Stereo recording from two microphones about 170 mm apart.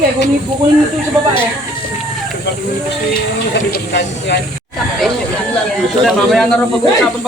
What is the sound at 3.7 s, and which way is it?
Speech, 90° left.